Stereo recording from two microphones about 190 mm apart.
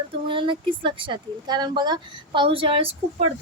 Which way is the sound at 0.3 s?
25° right (ahead or behind).